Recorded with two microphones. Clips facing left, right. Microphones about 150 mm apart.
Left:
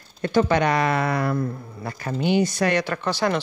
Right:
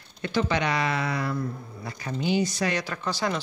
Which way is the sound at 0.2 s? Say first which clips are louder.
Left 6 dB; 50° left (ahead or behind).